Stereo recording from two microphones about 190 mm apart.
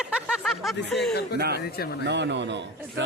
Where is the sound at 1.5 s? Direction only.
55° left (ahead or behind).